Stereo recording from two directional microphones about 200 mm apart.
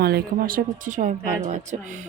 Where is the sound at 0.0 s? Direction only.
50° right (ahead or behind).